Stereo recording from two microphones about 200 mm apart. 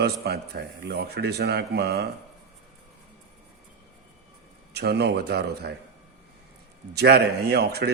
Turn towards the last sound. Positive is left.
turn(degrees=-55)  # may be behind; listen again after turning